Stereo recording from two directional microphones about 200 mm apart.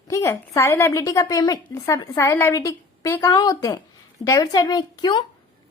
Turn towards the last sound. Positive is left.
turn(degrees=20)  # may be behind; listen again after turning